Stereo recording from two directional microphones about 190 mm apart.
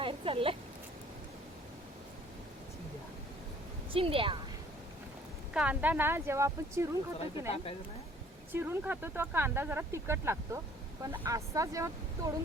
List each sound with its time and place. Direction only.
0.0 s speech: 30° right (ahead or behind)
3.9 s a woman's voice: 30° right (ahead or behind)
5.5 s speech: 5° right (ahead or behind)
7.5 s speech: 30° left (ahead or behind)
8.5 s speech: 10° right (ahead or behind)